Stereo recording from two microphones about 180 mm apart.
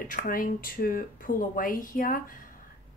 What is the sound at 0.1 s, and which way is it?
A woman's voice, 50° left (ahead or behind).